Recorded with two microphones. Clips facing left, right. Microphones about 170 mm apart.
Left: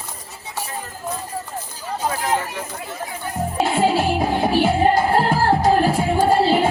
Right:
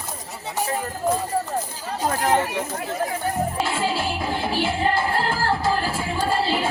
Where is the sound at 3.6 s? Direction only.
55° left (ahead or behind).